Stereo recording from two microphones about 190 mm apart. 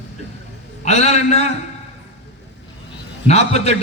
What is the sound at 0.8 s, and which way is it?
Speech, 35° left (ahead or behind).